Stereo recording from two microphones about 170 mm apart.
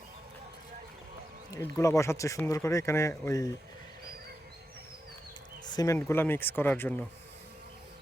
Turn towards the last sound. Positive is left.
turn(degrees=10)  # may be behind; listen again after turning